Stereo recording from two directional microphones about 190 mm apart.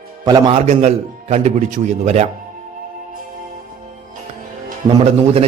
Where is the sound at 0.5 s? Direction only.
35° right (ahead or behind).